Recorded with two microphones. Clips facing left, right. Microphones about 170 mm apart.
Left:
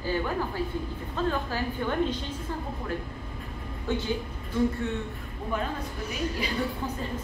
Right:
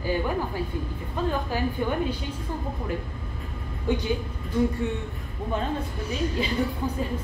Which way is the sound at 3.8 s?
15° right (ahead or behind).